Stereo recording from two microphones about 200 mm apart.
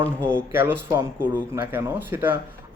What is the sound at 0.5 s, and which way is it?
Speech, 10° right (ahead or behind).